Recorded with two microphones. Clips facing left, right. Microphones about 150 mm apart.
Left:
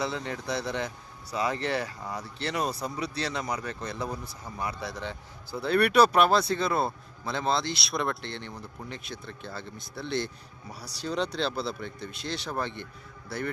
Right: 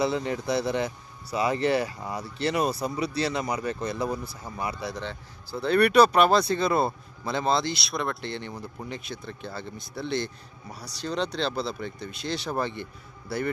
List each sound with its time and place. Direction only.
0.0 s speech: 10° right (ahead or behind)
5.0 s speech: 10° left (ahead or behind)